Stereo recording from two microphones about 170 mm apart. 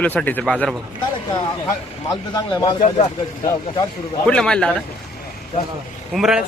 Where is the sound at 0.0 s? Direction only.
10° left (ahead or behind).